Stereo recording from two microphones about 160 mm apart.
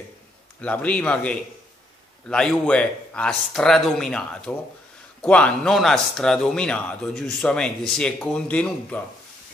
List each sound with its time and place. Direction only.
0.6 s a man's voice: 10° left (ahead or behind)